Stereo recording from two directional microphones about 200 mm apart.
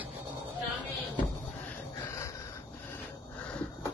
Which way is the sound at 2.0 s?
15° left (ahead or behind).